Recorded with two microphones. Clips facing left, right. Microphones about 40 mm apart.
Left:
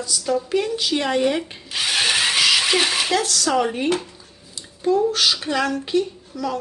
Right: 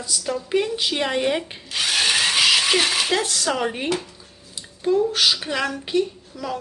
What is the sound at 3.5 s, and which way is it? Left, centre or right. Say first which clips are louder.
Speech: left 4 dB; centre.